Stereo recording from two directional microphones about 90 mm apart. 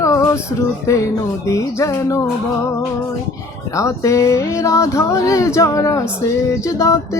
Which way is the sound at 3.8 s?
35° left (ahead or behind).